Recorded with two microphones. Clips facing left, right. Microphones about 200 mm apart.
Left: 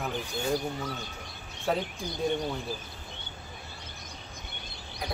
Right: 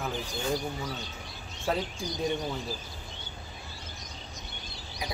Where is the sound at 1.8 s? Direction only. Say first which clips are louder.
Even; 55° left (ahead or behind).